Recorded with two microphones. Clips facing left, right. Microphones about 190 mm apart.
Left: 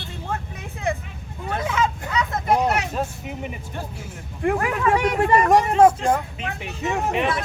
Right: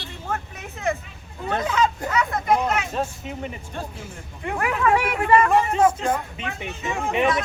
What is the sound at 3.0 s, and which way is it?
Speech, 10° left (ahead or behind).